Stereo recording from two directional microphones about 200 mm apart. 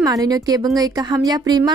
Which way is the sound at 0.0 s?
20° right (ahead or behind).